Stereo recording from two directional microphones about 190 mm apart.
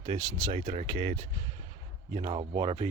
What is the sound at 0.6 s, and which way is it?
Speech, 35° right (ahead or behind).